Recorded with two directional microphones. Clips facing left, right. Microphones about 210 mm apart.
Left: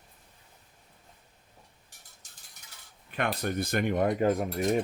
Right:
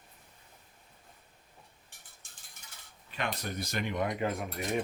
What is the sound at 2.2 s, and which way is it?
Mechanisms, 40° left (ahead or behind).